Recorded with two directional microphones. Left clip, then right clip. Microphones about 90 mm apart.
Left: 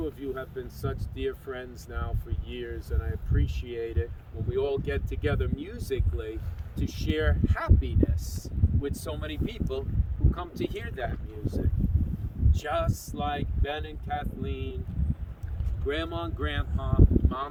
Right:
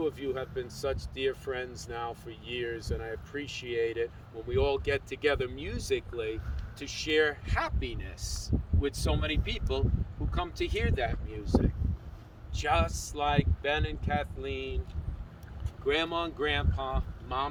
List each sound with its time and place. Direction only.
0.2 s speech: 30° left (ahead or behind)
15.9 s speech: 30° left (ahead or behind)